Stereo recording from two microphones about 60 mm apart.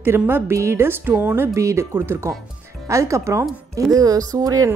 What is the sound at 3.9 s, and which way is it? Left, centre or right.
Speech, right.